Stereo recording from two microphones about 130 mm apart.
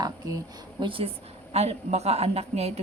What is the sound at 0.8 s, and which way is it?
A woman's voice, 45° right (ahead or behind).